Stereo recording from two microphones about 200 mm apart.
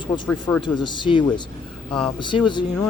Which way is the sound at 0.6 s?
25° left (ahead or behind).